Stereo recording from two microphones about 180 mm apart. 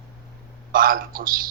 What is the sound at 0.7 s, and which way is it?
Speech, 50° right (ahead or behind).